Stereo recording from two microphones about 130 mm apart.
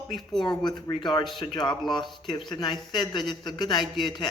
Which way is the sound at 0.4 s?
30° left (ahead or behind).